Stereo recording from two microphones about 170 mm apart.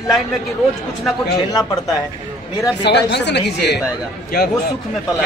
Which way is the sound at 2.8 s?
85° left.